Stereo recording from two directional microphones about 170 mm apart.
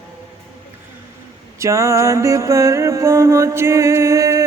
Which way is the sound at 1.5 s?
20° right (ahead or behind).